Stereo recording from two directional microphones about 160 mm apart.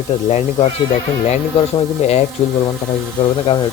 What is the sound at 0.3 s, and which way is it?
Speech, 45° left (ahead or behind).